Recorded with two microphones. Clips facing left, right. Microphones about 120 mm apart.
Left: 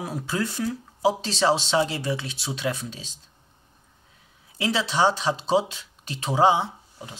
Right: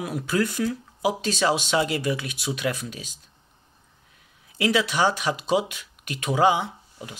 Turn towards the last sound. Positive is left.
turn(degrees=25)  # may be behind; listen again after turning